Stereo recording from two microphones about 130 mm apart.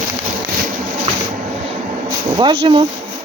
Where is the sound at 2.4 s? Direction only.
40° right (ahead or behind).